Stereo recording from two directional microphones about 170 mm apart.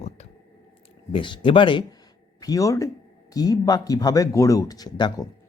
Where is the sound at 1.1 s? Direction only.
30° left (ahead or behind).